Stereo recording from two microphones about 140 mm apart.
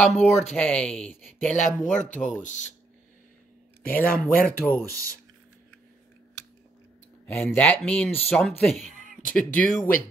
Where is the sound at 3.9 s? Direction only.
90° left.